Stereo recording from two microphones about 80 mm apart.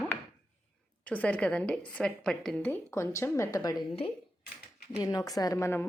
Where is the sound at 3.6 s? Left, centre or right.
Left.